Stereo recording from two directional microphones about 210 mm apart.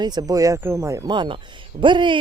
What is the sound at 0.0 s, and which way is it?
Speech, 20° right (ahead or behind).